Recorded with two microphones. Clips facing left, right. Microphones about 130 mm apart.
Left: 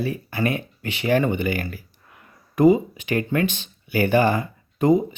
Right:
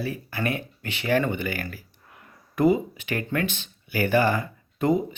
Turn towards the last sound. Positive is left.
turn(degrees=15)  # may be behind; listen again after turning